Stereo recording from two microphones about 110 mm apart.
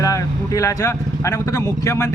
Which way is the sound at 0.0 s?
30° left (ahead or behind).